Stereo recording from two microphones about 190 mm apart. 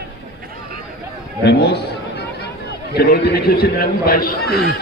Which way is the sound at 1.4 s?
60° left (ahead or behind).